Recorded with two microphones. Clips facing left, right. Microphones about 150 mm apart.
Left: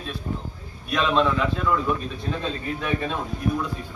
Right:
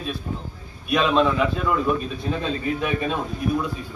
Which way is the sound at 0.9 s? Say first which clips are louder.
Right 2 dB; 15° right (ahead or behind).